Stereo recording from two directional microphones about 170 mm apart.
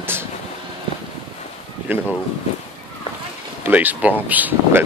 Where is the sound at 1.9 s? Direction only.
10° right (ahead or behind).